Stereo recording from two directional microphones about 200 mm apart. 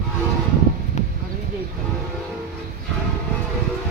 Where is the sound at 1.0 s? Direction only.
35° left (ahead or behind).